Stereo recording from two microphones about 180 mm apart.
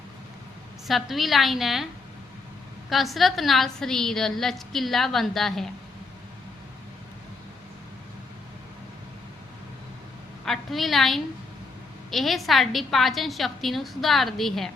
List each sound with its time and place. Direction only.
0.9 s a woman's voice: centre (ahead or behind)
2.9 s a woman's voice: centre (ahead or behind)
10.4 s a woman's voice: centre (ahead or behind)